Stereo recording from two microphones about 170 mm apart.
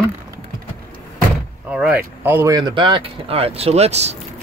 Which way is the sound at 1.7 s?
10° right (ahead or behind).